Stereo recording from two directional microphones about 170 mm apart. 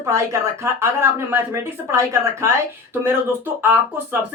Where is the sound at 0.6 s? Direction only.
15° right (ahead or behind).